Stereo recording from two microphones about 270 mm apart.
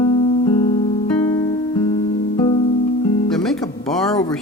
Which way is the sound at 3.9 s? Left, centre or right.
Centre.